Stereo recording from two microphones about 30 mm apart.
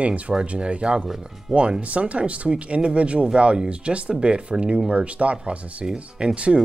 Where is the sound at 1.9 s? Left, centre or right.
Right.